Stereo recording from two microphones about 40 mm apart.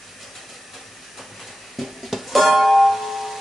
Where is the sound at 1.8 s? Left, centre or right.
Centre.